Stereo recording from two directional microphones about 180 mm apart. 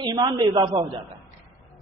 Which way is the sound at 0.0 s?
25° right (ahead or behind).